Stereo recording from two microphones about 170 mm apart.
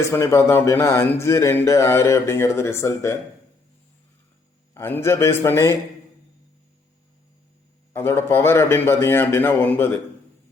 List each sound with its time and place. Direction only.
0.0 s a man's voice: 15° left (ahead or behind)
4.7 s a man's voice: 15° left (ahead or behind)
7.9 s a man's voice: 15° left (ahead or behind)